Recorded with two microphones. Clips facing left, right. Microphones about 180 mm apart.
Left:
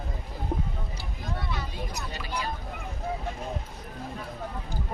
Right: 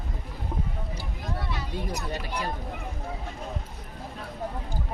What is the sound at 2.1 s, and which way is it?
Speech, 55° right (ahead or behind).